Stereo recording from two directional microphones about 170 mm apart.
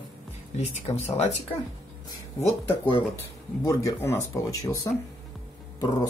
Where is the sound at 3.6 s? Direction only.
15° left (ahead or behind).